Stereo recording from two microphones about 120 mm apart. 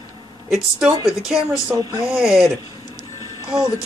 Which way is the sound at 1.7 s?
30° right (ahead or behind).